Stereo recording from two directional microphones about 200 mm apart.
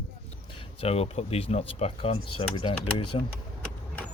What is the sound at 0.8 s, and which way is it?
Speech, 30° left (ahead or behind).